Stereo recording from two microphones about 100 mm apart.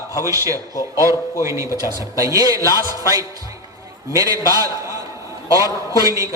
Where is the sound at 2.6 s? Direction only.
35° left (ahead or behind).